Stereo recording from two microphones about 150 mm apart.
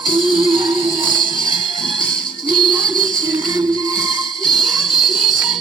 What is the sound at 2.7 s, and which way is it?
Music, 30° right (ahead or behind).